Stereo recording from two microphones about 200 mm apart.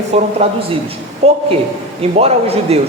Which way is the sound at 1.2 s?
30° right (ahead or behind).